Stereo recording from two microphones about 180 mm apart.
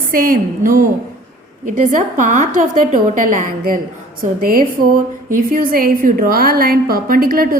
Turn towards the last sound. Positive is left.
turn(degrees=-55)  # may be behind; listen again after turning